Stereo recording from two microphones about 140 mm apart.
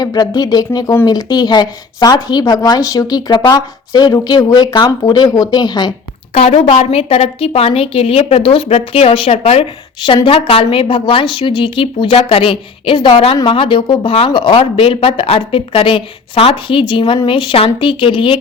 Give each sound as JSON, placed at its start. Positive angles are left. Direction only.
{"t": 0.0, "sound": "speech", "side_deg": 30}
{"t": 6.3, "sound": "a woman's voice", "side_deg": 50}